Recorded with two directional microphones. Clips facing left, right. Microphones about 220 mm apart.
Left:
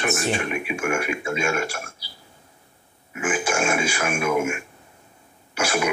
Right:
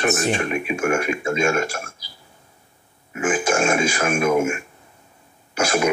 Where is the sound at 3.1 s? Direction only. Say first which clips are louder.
Right 4 dB; 40° right (ahead or behind).